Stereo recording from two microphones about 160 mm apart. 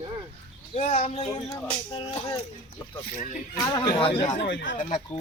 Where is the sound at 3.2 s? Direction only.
50° left (ahead or behind).